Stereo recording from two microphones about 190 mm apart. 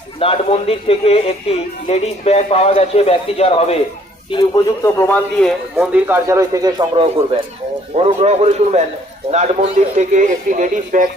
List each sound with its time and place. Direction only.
0.2 s a man's voice: 30° left (ahead or behind); by 7.0 s 20° right (ahead or behind)
7.9 s a man's voice: 35° right (ahead or behind)